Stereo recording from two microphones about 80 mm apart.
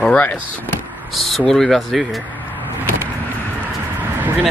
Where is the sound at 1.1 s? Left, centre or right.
Centre.